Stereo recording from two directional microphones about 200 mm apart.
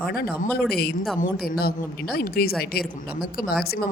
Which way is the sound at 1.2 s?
50° left (ahead or behind).